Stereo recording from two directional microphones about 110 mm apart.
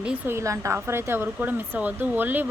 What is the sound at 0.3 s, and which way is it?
Speech, 25° right (ahead or behind).